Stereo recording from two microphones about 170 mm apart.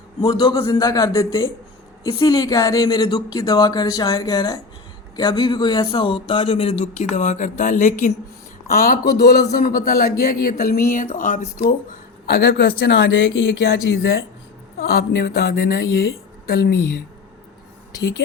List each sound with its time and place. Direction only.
0.2 s a man's voice: 25° left (ahead or behind); by 8.1 s 45° left (ahead or behind)
8.6 s speech: 60° left (ahead or behind)
12.2 s speech: 65° left (ahead or behind)